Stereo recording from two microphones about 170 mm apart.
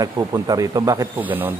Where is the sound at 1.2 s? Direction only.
10° right (ahead or behind).